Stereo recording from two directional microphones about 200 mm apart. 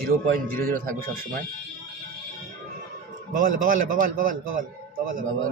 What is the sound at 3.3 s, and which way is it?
A man's voice, 40° right (ahead or behind).